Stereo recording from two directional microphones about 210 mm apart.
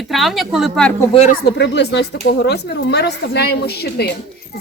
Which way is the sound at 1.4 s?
55° left (ahead or behind).